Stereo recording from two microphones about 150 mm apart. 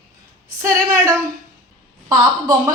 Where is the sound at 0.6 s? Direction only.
20° right (ahead or behind).